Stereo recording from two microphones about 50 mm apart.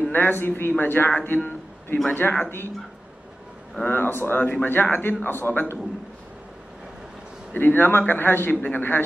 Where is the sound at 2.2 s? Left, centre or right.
Left.